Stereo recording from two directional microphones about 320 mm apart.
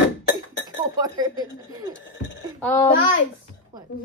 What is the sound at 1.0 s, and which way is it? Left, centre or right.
Speech, centre.